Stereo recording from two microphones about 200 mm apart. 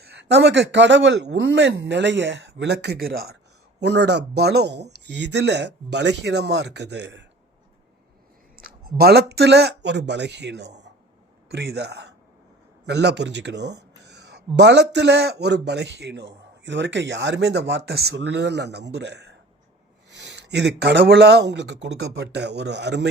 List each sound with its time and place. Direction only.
0.1 s speech: 60° right (ahead or behind)
8.5 s a man's voice: 50° right (ahead or behind)